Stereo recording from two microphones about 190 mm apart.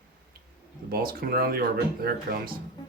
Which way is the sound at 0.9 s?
50° right (ahead or behind).